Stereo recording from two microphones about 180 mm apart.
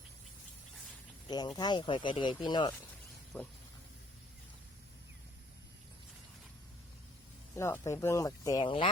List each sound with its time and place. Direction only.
1.3 s speech: 25° left (ahead or behind)
3.3 s speech: 10° left (ahead or behind)
7.5 s speech: 15° left (ahead or behind)